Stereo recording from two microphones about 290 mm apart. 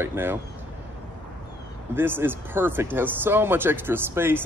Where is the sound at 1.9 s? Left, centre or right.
Centre.